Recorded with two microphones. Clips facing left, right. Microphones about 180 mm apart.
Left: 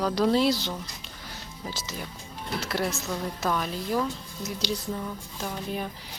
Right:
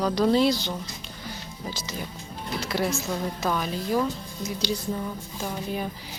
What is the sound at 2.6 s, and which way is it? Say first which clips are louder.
Speech: right 3 dB; centre (ahead or behind).